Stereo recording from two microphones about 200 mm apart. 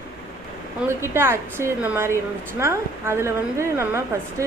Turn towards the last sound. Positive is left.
turn(degrees=-15)  # may be behind; listen again after turning